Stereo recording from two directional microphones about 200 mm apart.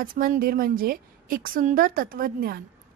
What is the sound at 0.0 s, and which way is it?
A woman's voice, 45° right (ahead or behind).